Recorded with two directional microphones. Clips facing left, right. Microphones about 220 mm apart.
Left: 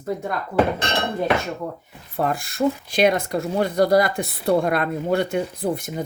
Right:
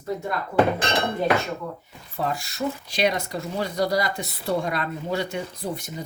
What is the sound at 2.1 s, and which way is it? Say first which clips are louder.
Speech: left 5 dB; 55° left (ahead or behind).